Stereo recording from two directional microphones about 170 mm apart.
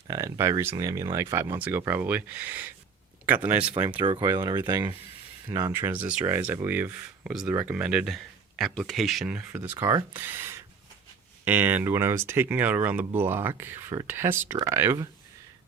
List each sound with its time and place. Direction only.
0.1 s speech: 20° right (ahead or behind)
4.0 s speech: 25° right (ahead or behind)